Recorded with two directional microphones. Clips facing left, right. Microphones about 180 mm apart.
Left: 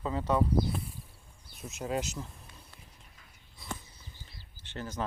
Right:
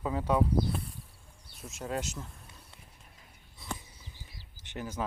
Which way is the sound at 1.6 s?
Centre (ahead or behind).